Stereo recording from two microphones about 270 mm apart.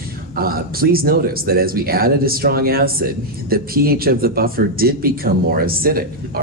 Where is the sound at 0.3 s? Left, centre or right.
Right.